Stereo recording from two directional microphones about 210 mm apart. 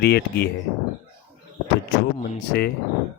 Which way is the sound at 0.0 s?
50° left (ahead or behind).